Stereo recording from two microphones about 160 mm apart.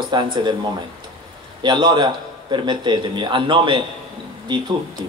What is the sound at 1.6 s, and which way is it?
A man's voice, 25° right (ahead or behind).